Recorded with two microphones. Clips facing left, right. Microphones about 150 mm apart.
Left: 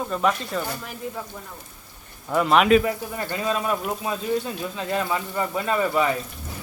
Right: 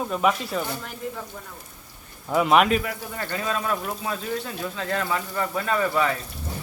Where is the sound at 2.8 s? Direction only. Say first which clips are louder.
Left 5 dB; 20° left (ahead or behind).